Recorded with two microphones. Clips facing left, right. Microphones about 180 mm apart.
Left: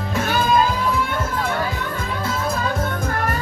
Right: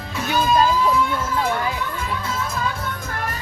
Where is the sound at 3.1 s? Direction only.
50° left (ahead or behind).